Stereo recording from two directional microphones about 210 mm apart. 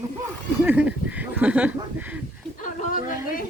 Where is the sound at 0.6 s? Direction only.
5° right (ahead or behind).